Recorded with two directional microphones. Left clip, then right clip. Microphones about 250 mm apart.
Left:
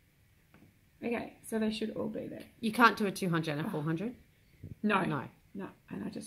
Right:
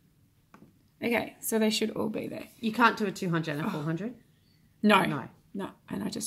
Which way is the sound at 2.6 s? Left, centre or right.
Centre.